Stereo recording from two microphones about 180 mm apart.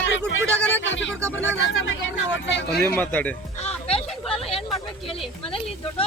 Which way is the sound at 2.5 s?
70° left (ahead or behind).